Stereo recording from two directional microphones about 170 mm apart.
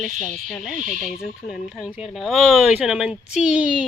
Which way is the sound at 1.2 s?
5° right (ahead or behind).